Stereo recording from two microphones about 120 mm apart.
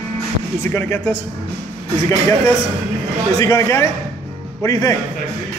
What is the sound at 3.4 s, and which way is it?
Speech, 25° left (ahead or behind).